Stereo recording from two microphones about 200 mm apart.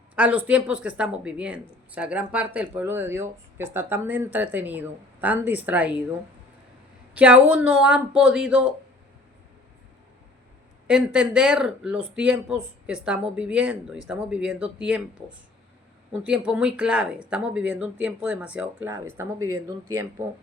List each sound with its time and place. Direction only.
0.2 s a woman's voice: 5° right (ahead or behind)
7.1 s a woman's voice: 5° right (ahead or behind)
10.8 s speech: 5° right (ahead or behind)
16.2 s a woman's voice: 5° right (ahead or behind)